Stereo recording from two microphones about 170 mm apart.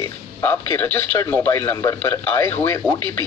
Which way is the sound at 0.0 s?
15° left (ahead or behind).